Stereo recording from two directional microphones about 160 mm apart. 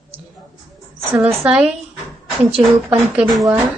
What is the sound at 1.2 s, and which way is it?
Speech, 15° right (ahead or behind).